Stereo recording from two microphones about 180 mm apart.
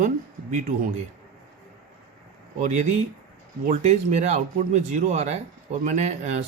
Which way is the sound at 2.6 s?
40° right (ahead or behind).